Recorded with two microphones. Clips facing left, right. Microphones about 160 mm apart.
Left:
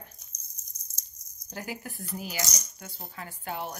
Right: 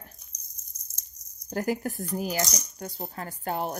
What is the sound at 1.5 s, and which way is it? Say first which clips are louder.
Speech: right 10 dB; 45° right (ahead or behind).